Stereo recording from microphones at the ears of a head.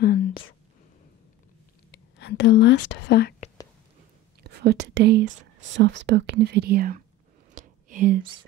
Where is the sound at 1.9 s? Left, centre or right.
Left.